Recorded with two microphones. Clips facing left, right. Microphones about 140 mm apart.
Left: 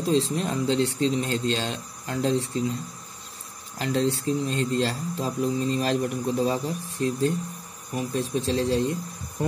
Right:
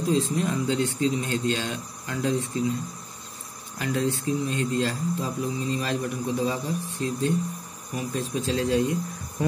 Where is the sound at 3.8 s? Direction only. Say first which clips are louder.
Left 2 dB; 35° left (ahead or behind).